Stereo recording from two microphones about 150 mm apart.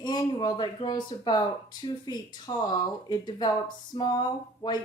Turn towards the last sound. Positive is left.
turn(degrees=30)  # may be behind; listen again after turning